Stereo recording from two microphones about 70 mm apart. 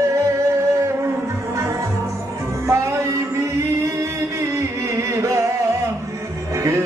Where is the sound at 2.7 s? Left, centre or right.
Right.